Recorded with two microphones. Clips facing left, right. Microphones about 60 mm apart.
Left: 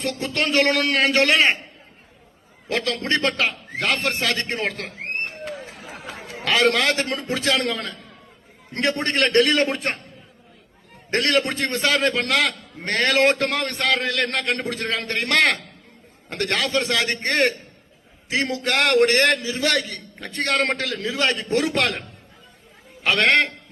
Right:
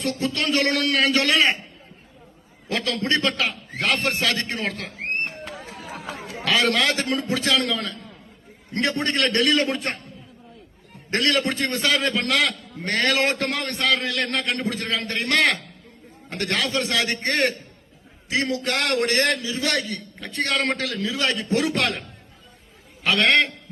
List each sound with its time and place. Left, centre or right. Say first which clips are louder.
0.2 s a man's voice: left 4 dB; left
2.7 s a man's voice: left 1 dB; left
3.9 s a man's voice: right 1 dB; left
5.7 s chatter: right 2 dB; right
6.5 s a man's voice: left 2 dB; left
11.1 s a man's voice: left 1 dB; left
23.0 s a man's voice: left 1 dB; left